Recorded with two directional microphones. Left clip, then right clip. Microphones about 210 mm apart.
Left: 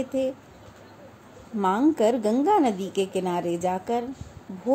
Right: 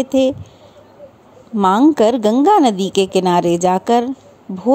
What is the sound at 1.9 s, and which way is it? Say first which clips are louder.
A woman's voice: right 9 dB; 45° right (ahead or behind).